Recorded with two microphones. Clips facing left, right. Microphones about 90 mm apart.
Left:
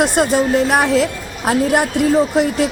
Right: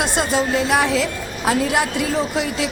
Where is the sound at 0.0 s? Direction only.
45° left (ahead or behind).